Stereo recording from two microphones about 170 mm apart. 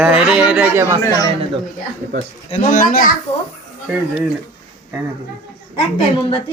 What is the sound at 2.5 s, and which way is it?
Speech, 50° left (ahead or behind).